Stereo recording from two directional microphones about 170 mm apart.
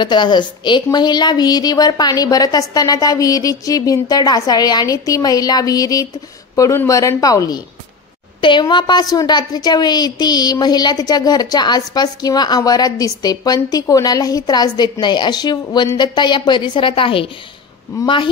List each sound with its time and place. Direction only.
0.0 s speech: 25° left (ahead or behind)